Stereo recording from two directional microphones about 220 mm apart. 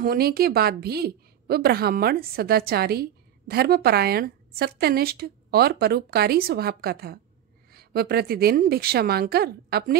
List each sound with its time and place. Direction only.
0.0 s a woman's voice: 45° right (ahead or behind)